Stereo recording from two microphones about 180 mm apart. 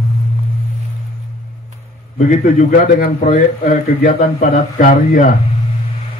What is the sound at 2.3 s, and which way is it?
A man's voice, 45° left (ahead or behind).